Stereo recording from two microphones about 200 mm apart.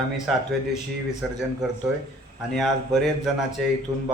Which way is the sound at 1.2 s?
Centre (ahead or behind).